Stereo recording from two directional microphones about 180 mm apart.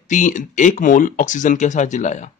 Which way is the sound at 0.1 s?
45° left (ahead or behind).